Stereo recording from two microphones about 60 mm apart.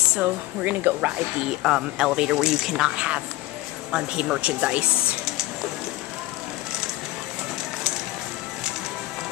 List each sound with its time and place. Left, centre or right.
0.2 s speech: right
1.6 s speech: centre
3.9 s speech: centre